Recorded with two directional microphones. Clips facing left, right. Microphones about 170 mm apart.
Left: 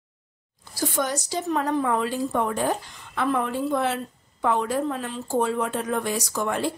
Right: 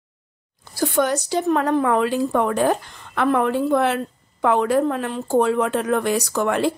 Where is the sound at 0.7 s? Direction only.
60° right (ahead or behind).